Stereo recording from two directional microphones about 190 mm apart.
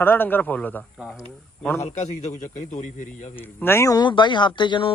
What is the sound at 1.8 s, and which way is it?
A man's voice, 35° left (ahead or behind).